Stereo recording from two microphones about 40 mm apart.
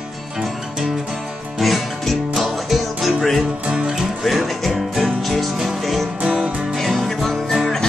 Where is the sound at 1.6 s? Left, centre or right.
Centre.